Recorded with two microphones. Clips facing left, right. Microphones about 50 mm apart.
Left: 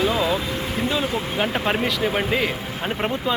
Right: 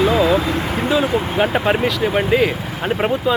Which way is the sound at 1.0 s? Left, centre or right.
Centre.